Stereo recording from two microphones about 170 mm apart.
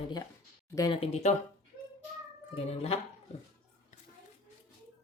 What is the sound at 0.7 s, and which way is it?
Speech, 25° left (ahead or behind).